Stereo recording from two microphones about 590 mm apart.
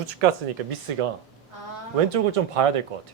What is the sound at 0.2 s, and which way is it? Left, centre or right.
Speech, right.